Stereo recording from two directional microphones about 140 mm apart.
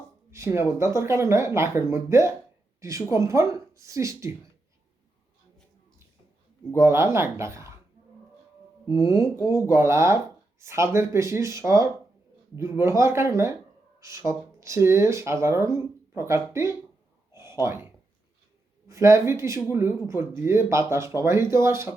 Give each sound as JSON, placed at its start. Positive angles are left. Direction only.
{"t": 0.3, "sound": "a sound", "side_deg": -20}
{"t": 0.8, "sound": "speech", "side_deg": -20}
{"t": 6.7, "sound": "speech", "side_deg": -20}
{"t": 9.0, "sound": "speech", "side_deg": -20}
{"t": 17.3, "sound": "a sound", "side_deg": -20}
{"t": 18.9, "sound": "speech", "side_deg": -20}